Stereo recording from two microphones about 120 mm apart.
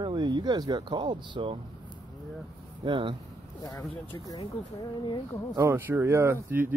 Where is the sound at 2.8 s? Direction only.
45° right (ahead or behind).